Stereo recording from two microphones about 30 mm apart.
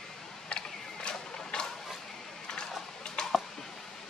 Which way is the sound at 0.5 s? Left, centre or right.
Left.